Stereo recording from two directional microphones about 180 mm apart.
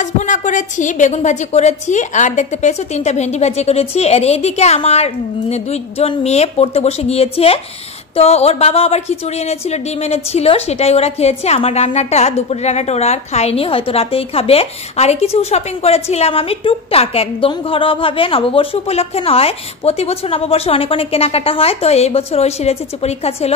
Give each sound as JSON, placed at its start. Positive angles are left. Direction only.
{"t": 0.0, "sound": "speech", "side_deg": 45}